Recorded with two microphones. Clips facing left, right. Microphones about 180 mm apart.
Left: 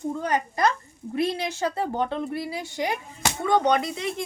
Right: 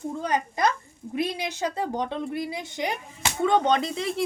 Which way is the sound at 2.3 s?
20° right (ahead or behind).